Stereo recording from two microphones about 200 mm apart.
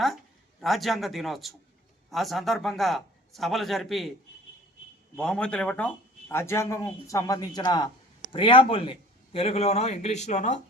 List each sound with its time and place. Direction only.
0.6 s speech: centre (ahead or behind)
5.1 s a man's voice: 5° left (ahead or behind); by 10.6 s 35° left (ahead or behind)